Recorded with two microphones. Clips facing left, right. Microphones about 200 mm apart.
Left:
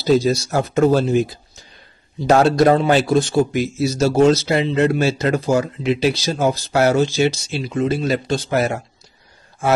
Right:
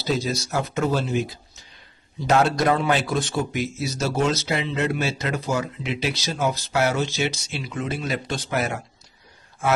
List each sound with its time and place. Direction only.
0.0 s speech: 35° left (ahead or behind)
2.4 s speech: 30° left (ahead or behind)